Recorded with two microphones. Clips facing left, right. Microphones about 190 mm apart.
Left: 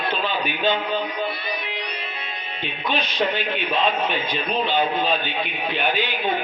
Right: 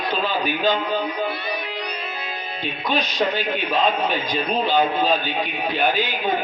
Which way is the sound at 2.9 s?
40° right (ahead or behind).